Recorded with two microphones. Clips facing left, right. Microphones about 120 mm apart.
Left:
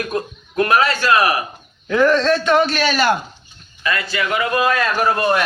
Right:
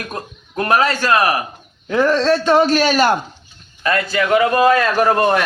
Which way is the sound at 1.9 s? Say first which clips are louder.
Even; 30° right (ahead or behind).